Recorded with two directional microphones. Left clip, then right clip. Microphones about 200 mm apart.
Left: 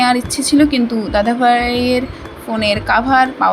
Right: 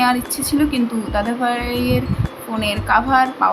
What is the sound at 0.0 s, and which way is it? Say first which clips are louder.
A woman's voice: left 3 dB; 20° left (ahead or behind).